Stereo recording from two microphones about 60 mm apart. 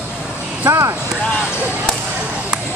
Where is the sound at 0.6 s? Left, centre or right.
Right.